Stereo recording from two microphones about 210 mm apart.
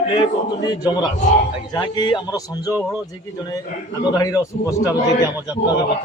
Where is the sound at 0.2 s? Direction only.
20° left (ahead or behind).